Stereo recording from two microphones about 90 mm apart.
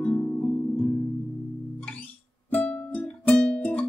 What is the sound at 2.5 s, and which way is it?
Music, 20° left (ahead or behind).